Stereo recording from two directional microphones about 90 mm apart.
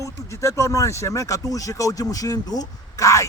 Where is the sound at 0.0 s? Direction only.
35° left (ahead or behind).